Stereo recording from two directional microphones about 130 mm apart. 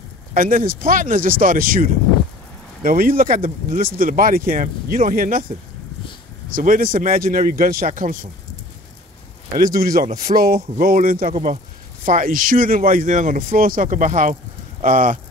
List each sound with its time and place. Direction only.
0.3 s speech: 90° right
6.5 s speech: 90° right
9.9 s speech: 90° right
11.4 s speech: 70° right (ahead or behind)
14.8 s speech: 90° right